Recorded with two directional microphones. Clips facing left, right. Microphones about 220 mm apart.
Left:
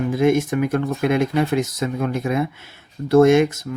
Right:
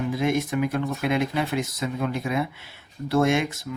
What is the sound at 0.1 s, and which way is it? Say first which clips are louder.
Speech: left 8 dB; 50° left (ahead or behind).